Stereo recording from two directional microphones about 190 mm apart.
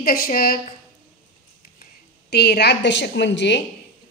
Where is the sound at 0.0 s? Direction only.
50° left (ahead or behind).